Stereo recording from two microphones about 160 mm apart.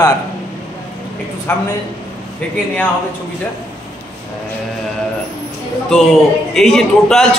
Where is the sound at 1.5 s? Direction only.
15° left (ahead or behind).